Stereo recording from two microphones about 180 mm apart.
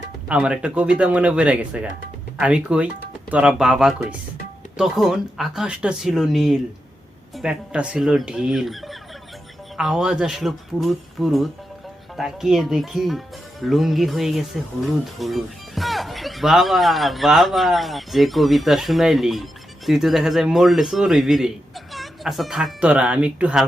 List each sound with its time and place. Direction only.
0.3 s speech: 5° right (ahead or behind)